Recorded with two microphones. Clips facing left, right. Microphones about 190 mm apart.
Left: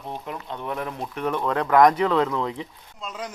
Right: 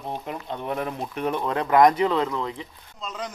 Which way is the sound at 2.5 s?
10° left (ahead or behind).